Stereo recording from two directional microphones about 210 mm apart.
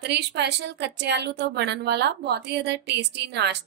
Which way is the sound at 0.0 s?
55° right (ahead or behind).